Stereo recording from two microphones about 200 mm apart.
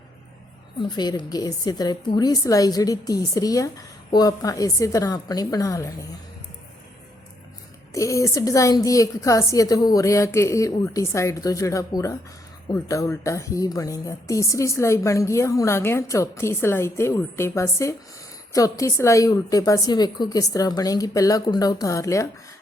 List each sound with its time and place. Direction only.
0.8 s speech: 20° left (ahead or behind)
7.9 s speech: 15° left (ahead or behind)